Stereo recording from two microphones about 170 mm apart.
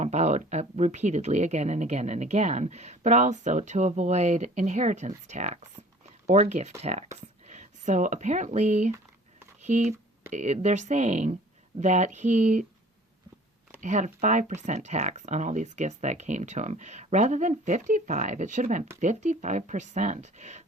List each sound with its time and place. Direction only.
0.0 s speech: 40° right (ahead or behind)
13.8 s speech: 45° right (ahead or behind)